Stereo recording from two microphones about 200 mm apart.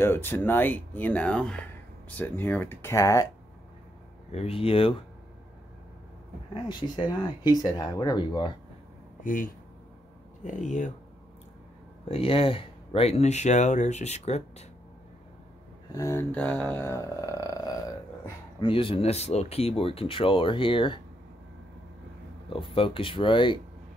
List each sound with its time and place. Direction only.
0.0 s speech: 10° left (ahead or behind)
4.3 s speech: 30° left (ahead or behind)
6.5 s speech: 25° left (ahead or behind)
9.2 s speech: 40° left (ahead or behind)
12.1 s speech: 30° left (ahead or behind)
15.9 s a sound: 15° left (ahead or behind)
18.6 s speech: 25° left (ahead or behind)
22.5 s speech: 25° left (ahead or behind)